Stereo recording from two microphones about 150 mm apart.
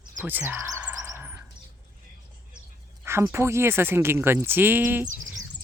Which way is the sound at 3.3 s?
15° right (ahead or behind).